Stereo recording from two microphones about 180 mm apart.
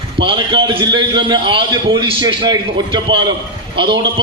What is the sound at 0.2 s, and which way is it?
Speech, 80° right.